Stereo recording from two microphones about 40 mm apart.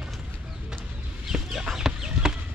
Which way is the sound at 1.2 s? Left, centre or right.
Centre.